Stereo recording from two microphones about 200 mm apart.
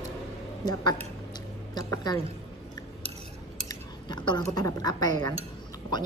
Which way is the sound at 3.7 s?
20° left (ahead or behind).